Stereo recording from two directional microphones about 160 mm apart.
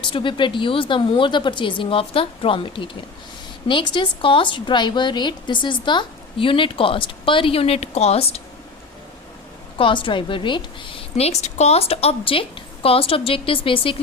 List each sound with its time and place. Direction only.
0.0 s a woman's voice: 30° left (ahead or behind)
9.7 s a woman's voice: 30° left (ahead or behind)